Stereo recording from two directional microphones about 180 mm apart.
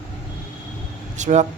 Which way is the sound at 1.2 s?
40° right (ahead or behind).